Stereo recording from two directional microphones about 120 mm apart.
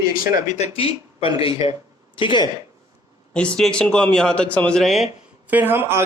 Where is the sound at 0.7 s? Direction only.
50° left (ahead or behind).